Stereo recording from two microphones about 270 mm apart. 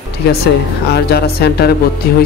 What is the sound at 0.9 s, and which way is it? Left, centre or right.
Speech, left.